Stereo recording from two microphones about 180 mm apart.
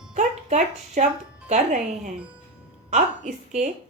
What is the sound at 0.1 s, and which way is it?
Speech, 40° right (ahead or behind).